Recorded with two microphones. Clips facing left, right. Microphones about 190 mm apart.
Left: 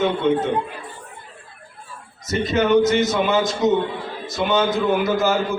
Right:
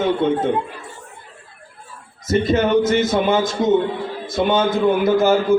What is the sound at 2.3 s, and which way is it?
A man's voice, 50° right (ahead or behind).